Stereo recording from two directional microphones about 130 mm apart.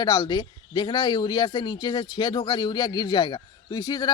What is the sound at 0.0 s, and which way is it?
Speech, 30° left (ahead or behind).